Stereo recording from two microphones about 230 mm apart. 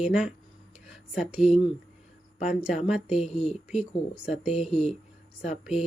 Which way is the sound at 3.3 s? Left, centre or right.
Left.